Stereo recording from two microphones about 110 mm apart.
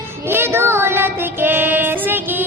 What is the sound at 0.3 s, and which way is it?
Child singing, 20° right (ahead or behind).